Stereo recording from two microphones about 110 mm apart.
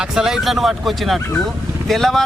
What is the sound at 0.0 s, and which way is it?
A man's voice, 5° right (ahead or behind).